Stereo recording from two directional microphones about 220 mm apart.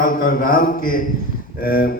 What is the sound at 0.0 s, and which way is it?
A man's voice, 40° left (ahead or behind).